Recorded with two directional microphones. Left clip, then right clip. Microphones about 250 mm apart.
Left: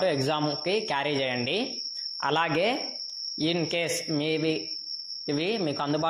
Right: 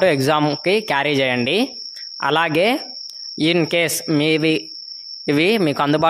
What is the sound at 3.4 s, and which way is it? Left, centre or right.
A man's voice, right.